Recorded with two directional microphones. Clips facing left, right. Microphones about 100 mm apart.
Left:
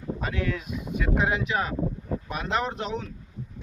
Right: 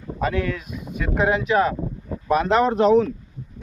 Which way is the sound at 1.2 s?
45° right (ahead or behind).